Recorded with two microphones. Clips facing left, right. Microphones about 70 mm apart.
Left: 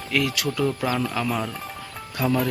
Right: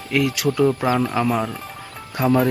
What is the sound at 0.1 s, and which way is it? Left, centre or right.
Speech, centre.